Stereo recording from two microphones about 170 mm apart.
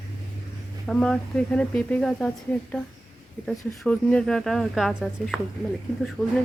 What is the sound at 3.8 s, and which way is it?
A woman's voice, 5° left (ahead or behind).